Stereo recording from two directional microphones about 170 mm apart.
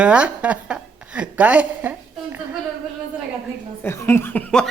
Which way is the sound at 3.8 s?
15° left (ahead or behind).